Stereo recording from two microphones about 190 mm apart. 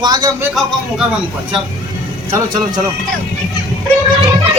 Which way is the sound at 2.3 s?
15° right (ahead or behind).